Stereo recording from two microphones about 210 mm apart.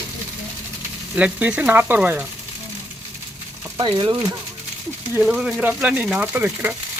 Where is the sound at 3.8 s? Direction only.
20° right (ahead or behind).